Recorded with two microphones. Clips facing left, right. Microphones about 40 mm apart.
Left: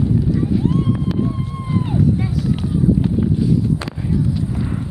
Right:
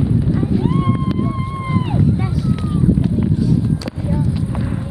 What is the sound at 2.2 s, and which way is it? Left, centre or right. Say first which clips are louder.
Speech: even; centre.